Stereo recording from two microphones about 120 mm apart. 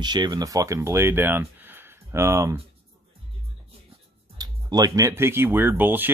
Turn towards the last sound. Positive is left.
turn(degrees=-15)  # may be behind; listen again after turning